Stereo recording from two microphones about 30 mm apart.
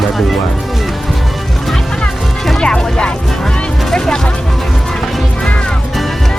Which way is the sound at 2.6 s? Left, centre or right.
Left.